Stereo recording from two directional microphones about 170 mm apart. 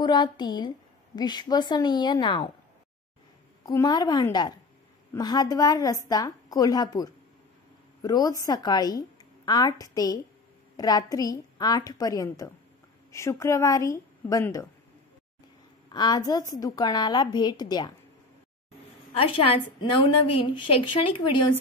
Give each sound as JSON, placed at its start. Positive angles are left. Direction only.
{"t": 0.0, "sound": "a woman's voice", "side_deg": 25}
{"t": 3.6, "sound": "a woman's voice", "side_deg": 25}
{"t": 15.9, "sound": "a woman's voice", "side_deg": 25}
{"t": 19.1, "sound": "a woman's voice", "side_deg": 35}